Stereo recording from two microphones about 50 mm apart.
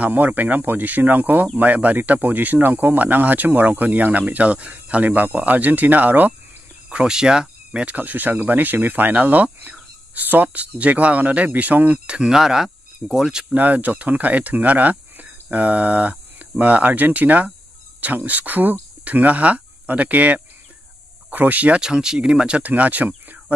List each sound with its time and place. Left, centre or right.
0.0 s speech: right
6.9 s speech: centre
7.8 s speech: right
12.2 s speech: centre
13.6 s speech: right
21.8 s speech: centre
22.6 s speech: right